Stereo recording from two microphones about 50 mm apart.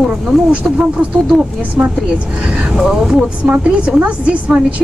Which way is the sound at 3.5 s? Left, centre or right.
Right.